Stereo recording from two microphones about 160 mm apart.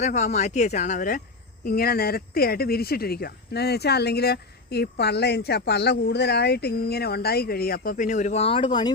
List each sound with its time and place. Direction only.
0.0 s speech: 45° left (ahead or behind)
1.6 s speech: 70° left (ahead or behind); by 8.9 s 30° left (ahead or behind)